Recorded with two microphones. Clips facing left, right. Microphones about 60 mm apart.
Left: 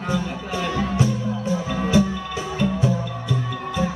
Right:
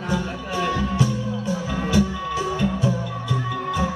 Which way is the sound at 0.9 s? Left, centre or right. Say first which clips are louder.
Left 1 dB; left.